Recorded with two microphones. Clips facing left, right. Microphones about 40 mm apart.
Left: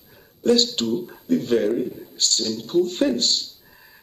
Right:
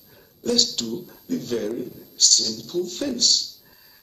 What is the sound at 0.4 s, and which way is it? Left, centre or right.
A man's voice, left.